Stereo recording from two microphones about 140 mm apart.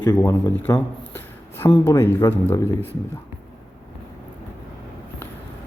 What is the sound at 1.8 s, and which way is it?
A man's voice, 15° left (ahead or behind).